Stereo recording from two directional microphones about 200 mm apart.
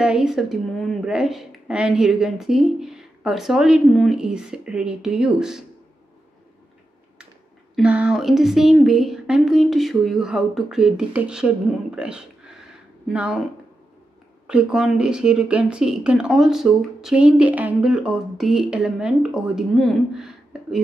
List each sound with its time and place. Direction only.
0.0 s speech: 5° right (ahead or behind)
7.7 s speech: 5° right (ahead or behind)
14.5 s speech: 5° right (ahead or behind)